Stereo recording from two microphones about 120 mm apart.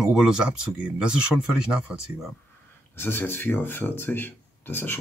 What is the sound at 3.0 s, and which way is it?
Speech, 20° left (ahead or behind).